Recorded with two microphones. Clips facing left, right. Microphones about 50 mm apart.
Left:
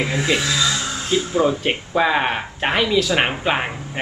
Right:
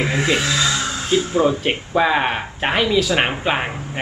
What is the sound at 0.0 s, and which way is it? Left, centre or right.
Speech, right.